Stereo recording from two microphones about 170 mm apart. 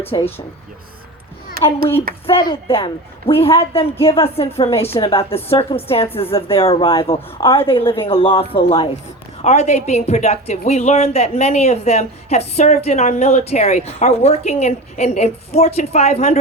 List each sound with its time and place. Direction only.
0.0 s a woman's voice: 35° left (ahead or behind)
1.6 s a child's voice: 60° right (ahead or behind)
2.2 s a woman's voice: 30° left (ahead or behind)